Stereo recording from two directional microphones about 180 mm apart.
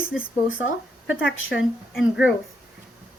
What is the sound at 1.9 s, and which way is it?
Speech, 5° right (ahead or behind).